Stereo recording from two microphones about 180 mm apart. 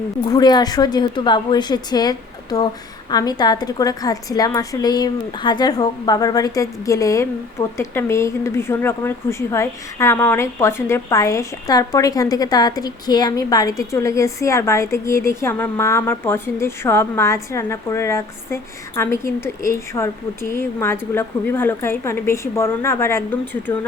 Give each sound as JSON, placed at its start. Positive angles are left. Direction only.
{"t": 0.3, "sound": "a woman's voice", "side_deg": 25}